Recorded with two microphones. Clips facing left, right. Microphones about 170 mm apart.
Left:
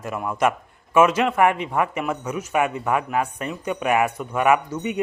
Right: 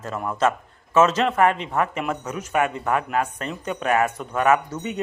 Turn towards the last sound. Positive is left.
turn(degrees=10)  # may be behind; listen again after turning